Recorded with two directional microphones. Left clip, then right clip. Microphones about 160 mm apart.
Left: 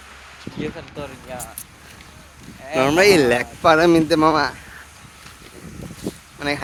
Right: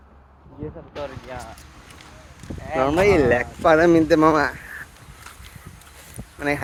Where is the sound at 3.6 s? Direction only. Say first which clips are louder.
Left 1 dB; 20° left (ahead or behind).